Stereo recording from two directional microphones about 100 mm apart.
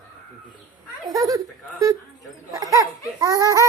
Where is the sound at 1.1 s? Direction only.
40° right (ahead or behind).